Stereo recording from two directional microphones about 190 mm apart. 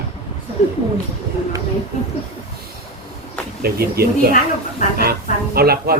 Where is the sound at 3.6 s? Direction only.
55° right (ahead or behind).